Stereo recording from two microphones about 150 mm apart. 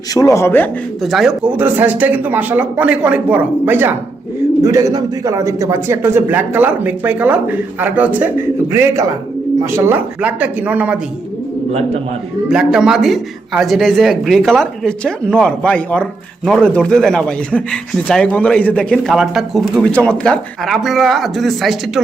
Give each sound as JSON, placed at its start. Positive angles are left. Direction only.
{"t": 0.1, "sound": "speech", "side_deg": 20}
{"t": 1.0, "sound": "a man's voice", "side_deg": 0}
{"t": 12.5, "sound": "a man's voice", "side_deg": -5}